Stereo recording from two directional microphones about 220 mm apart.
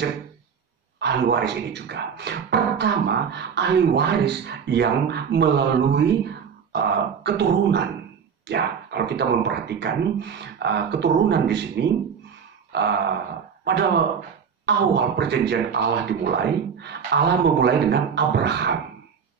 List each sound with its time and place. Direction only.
0.9 s speech: 50° right (ahead or behind)